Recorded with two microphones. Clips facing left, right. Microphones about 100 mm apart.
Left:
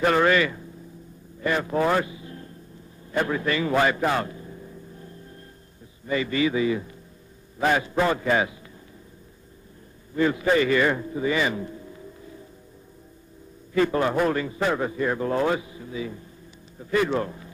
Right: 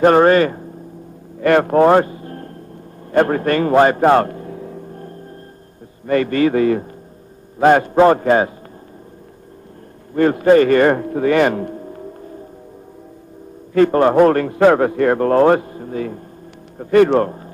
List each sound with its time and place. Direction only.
0.0 s a man's voice: 45° right (ahead or behind)
1.4 s speech: 65° right (ahead or behind)
3.1 s a sound: 55° right (ahead or behind)
6.0 s a man's voice: 55° right (ahead or behind)
10.1 s a man's voice: 55° right (ahead or behind)
13.7 s a man's voice: 55° right (ahead or behind)